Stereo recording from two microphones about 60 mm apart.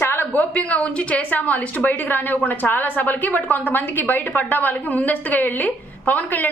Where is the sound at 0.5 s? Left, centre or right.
Left.